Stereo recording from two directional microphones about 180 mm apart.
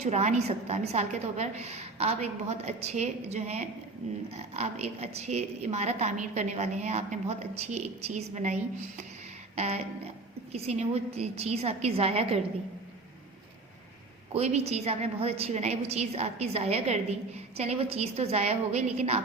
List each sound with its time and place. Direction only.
0.0 s a woman's voice: 40° right (ahead or behind)
9.6 s a woman's voice: 35° right (ahead or behind)
14.3 s a woman's voice: 35° right (ahead or behind)